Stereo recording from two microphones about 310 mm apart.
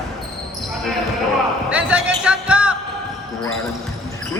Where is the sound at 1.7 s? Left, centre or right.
Centre.